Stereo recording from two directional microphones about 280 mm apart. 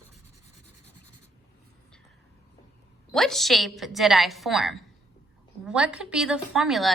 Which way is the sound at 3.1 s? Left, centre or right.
Centre.